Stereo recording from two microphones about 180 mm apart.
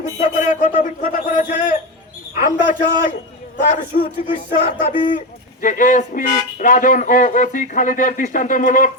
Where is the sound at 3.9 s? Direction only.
45° left (ahead or behind).